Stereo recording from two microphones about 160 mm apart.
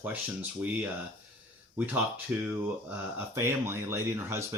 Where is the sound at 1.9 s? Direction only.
10° right (ahead or behind).